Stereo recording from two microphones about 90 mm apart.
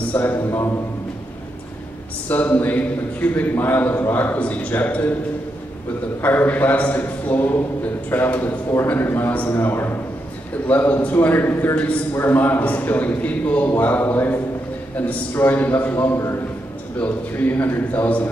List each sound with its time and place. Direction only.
0.1 s a man's voice: 25° left (ahead or behind)
2.2 s a man's voice: 20° left (ahead or behind)
6.2 s a man's voice: 20° left (ahead or behind)